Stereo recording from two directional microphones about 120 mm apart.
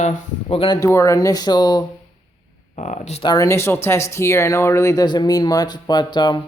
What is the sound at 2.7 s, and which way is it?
Speech, 75° left (ahead or behind).